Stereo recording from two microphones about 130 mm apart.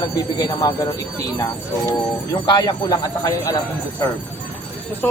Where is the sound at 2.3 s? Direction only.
30° left (ahead or behind).